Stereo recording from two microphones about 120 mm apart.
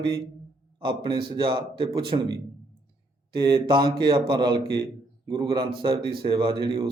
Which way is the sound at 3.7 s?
40° right (ahead or behind).